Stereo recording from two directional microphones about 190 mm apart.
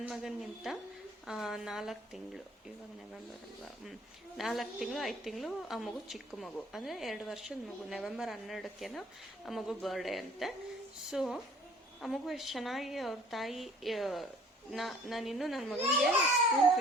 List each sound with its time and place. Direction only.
0.0 s a woman's voice: centre (ahead or behind)
4.4 s a woman's voice: centre (ahead or behind)